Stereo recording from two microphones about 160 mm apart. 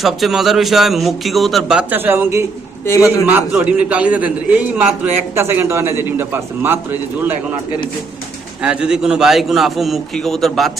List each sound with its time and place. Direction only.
0.0 s speech: centre (ahead or behind)
2.8 s a man's voice: 20° left (ahead or behind)
3.2 s a man's voice: 10° right (ahead or behind)
8.6 s speech: 5° right (ahead or behind)